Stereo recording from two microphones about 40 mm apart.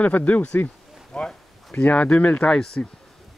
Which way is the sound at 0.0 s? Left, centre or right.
Left.